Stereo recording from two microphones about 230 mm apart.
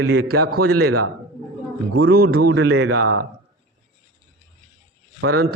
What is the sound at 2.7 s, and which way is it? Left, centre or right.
Speech, right.